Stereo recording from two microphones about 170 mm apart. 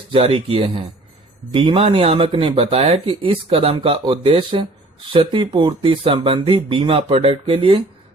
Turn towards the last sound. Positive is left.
turn(degrees=-30)  # may be behind; listen again after turning